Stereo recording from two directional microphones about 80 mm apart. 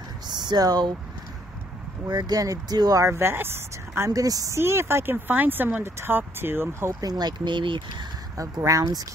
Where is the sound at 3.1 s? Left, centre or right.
Right.